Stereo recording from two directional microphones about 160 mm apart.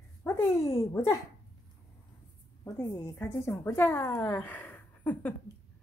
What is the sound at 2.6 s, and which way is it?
A woman's voice, 20° left (ahead or behind).